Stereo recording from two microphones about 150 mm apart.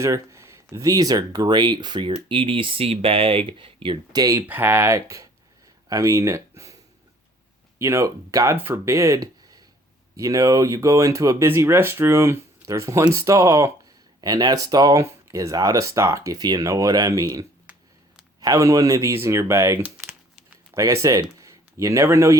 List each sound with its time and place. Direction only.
0.0 s speech: 20° right (ahead or behind)
4.4 s speech: 15° right (ahead or behind)
7.8 s speech: 20° right (ahead or behind)